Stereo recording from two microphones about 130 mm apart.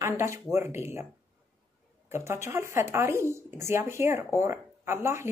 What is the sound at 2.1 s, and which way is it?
Speech, 20° right (ahead or behind).